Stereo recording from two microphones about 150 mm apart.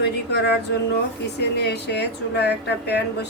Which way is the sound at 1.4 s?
90° left.